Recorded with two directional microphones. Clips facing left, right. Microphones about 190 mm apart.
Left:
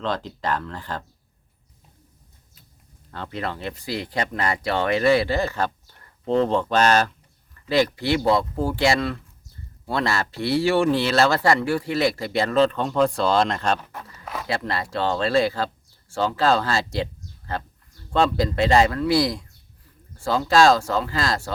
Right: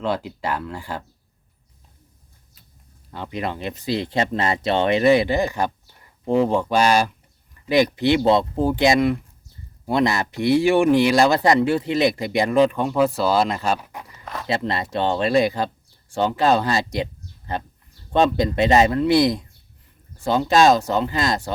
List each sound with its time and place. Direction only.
0.0 s speech: 10° right (ahead or behind)
3.1 s speech: 15° right (ahead or behind)
14.4 s speech: 20° right (ahead or behind)